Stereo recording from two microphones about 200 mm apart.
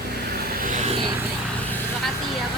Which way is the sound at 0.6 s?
45° right (ahead or behind).